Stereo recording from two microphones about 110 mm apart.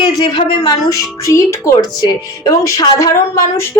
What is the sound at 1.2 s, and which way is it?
A woman's voice, 30° left (ahead or behind).